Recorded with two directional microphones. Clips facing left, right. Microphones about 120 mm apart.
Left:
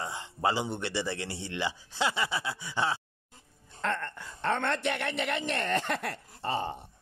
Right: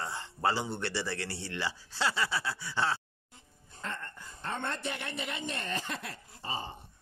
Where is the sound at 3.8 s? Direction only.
70° left (ahead or behind).